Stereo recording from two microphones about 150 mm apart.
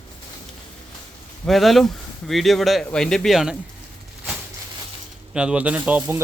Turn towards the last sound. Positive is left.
turn(degrees=-15)  # may be behind; listen again after turning